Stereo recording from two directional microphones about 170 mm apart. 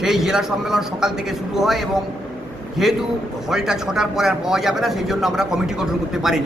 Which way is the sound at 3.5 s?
5° right (ahead or behind).